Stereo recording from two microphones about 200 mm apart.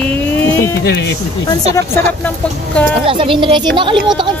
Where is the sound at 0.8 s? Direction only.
60° left (ahead or behind).